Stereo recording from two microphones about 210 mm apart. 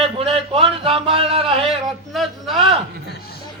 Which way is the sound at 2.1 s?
Centre (ahead or behind).